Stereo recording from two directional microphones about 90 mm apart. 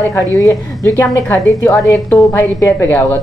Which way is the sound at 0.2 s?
40° right (ahead or behind).